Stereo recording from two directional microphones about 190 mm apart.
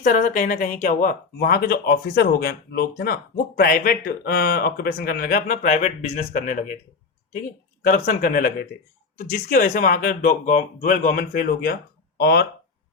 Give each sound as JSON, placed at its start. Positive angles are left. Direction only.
{"t": 0.0, "sound": "speech", "side_deg": 45}
{"t": 7.9, "sound": "speech", "side_deg": 45}